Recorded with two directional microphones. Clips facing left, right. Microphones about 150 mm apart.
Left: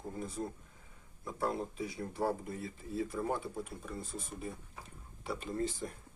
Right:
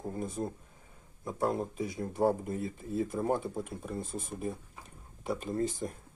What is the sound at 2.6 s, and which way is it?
Speech, 45° right (ahead or behind).